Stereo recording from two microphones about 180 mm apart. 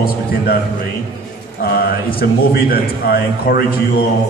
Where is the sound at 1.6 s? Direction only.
55° left (ahead or behind).